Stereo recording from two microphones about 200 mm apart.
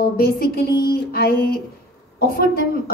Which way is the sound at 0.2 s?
50° left (ahead or behind).